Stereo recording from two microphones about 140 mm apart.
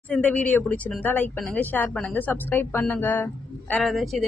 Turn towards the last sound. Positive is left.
turn(degrees=0)  # may be behind; listen again after turning